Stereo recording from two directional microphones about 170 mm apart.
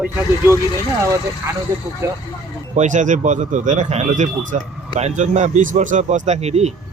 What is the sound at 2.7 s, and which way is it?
Speech, 45° right (ahead or behind).